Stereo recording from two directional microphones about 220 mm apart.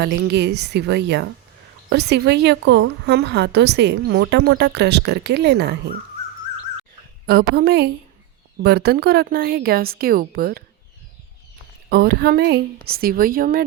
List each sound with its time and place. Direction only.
0.0 s a woman's voice: 50° right (ahead or behind)
7.3 s a woman's voice: 45° right (ahead or behind)
11.9 s a woman's voice: 45° right (ahead or behind)